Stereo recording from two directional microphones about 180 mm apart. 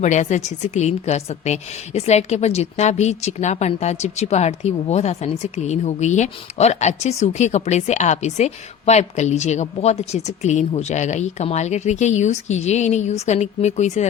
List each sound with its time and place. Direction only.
0.0 s a woman's voice: 40° left (ahead or behind)